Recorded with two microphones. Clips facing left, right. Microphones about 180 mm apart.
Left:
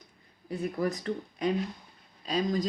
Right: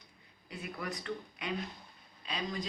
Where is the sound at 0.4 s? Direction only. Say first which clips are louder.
Left 11 dB; 40° left (ahead or behind).